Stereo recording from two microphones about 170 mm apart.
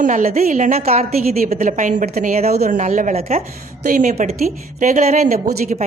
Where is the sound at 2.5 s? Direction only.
55° right (ahead or behind); by 3.4 s 40° right (ahead or behind).